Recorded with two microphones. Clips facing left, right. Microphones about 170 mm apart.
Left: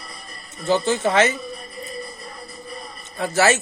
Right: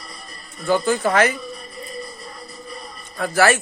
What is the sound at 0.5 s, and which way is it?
Speech, 25° left (ahead or behind).